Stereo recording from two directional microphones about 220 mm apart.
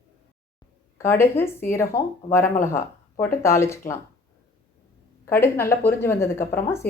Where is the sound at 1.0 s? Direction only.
10° left (ahead or behind).